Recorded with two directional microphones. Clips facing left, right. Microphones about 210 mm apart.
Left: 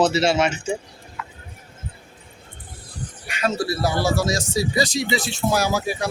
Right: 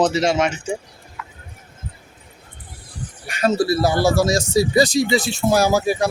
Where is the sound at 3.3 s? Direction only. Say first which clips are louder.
Right 5 dB; 40° right (ahead or behind).